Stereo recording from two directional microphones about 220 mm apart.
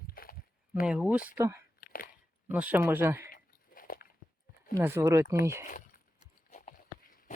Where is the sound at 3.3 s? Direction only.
40° left (ahead or behind).